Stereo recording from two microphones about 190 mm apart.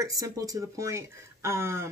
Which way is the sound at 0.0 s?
15° right (ahead or behind).